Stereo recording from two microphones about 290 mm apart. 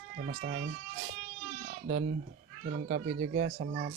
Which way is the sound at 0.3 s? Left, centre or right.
Right.